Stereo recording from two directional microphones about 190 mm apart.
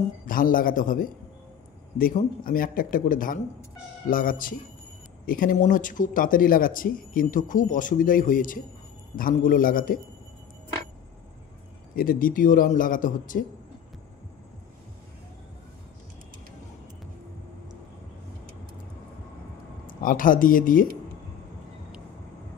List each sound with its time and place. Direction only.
0.3 s speech: 45° left (ahead or behind)
11.9 s speech: 50° left (ahead or behind)
19.9 s speech: 45° left (ahead or behind)